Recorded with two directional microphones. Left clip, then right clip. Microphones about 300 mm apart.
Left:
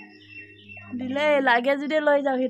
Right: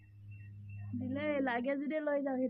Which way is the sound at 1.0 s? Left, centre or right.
Left.